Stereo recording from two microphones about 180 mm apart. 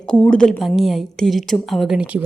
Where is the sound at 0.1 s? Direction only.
5° left (ahead or behind).